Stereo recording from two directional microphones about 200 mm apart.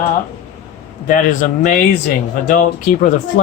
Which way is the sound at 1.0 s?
40° left (ahead or behind).